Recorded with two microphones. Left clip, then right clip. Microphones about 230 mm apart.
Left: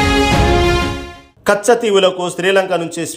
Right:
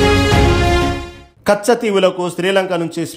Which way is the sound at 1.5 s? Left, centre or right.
Right.